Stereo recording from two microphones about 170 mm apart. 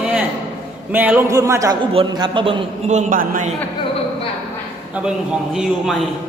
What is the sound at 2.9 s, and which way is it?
Speech, 50° right (ahead or behind).